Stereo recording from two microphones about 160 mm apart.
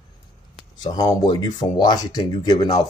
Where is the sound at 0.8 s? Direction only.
25° left (ahead or behind).